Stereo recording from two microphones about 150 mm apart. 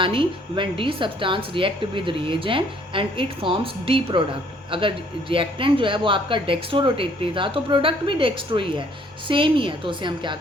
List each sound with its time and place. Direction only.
0.0 s a woman's voice: 35° right (ahead or behind)